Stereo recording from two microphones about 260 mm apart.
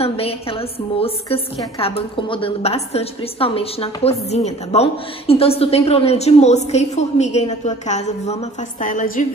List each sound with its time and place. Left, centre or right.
0.0 s a woman's voice: left